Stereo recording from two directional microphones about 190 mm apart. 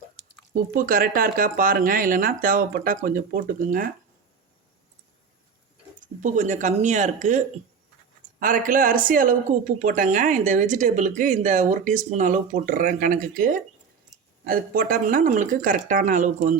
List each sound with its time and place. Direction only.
0.5 s speech: 45° right (ahead or behind)
6.2 s speech: 40° right (ahead or behind)